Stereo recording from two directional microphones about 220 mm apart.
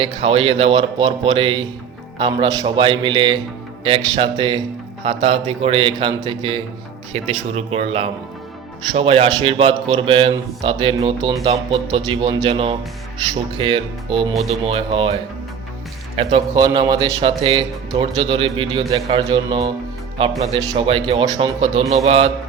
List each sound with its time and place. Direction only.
0.0 s a man's voice: 25° right (ahead or behind)